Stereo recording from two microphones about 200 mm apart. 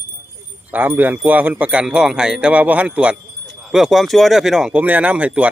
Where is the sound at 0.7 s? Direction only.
10° right (ahead or behind).